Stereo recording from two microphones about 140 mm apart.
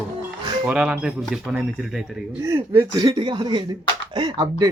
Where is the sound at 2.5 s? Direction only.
20° right (ahead or behind).